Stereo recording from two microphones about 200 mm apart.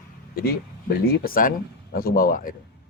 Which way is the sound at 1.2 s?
45° left (ahead or behind).